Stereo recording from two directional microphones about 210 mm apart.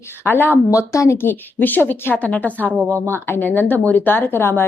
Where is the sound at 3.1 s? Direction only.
10° left (ahead or behind).